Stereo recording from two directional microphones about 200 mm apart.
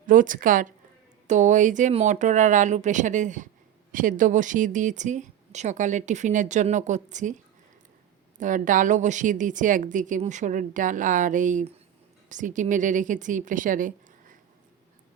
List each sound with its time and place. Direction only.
0.1 s speech: 40° right (ahead or behind)
8.4 s speech: 40° right (ahead or behind)